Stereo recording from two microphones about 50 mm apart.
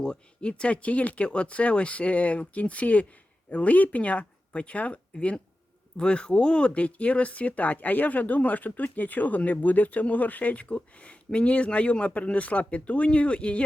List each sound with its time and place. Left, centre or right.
0.0 s speech: centre